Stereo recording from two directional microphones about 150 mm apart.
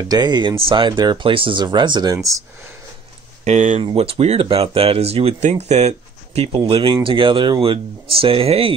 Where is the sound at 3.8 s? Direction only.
40° right (ahead or behind).